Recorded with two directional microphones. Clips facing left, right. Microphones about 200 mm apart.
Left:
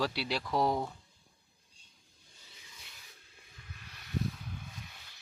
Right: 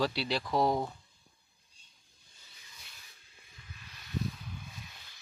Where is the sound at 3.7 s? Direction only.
60° left (ahead or behind).